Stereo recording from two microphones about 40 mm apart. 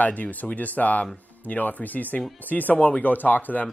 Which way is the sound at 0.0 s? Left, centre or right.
Left.